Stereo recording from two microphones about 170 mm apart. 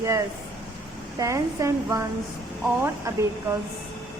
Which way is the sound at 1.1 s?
20° right (ahead or behind).